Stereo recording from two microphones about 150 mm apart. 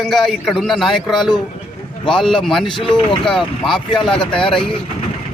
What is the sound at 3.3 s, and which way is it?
A man's voice, centre (ahead or behind).